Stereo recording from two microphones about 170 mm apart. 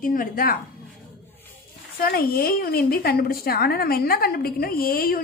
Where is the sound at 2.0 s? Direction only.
60° left (ahead or behind).